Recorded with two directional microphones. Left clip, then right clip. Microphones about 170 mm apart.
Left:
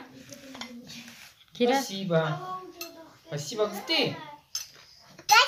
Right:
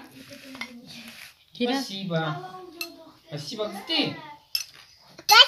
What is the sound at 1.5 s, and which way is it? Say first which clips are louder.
Speech: left 3 dB; 45° left (ahead or behind).